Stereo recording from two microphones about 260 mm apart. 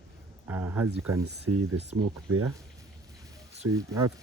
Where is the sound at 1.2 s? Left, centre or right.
Right.